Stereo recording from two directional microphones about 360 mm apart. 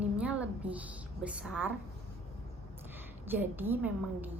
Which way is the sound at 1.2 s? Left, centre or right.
Centre.